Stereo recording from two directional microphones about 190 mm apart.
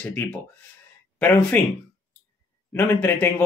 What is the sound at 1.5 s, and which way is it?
Speech, 5° left (ahead or behind).